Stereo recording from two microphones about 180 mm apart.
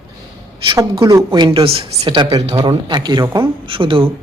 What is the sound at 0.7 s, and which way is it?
A woman's voice, 20° right (ahead or behind).